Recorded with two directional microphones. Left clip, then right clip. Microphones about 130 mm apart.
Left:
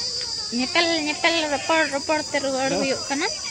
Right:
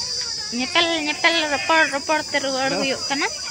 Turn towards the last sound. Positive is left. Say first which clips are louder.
# right 2 dB
turn(degrees=15)  # may be behind; listen again after turning